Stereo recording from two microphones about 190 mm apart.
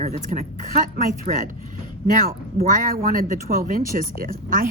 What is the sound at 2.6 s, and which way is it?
Speech, 45° right (ahead or behind).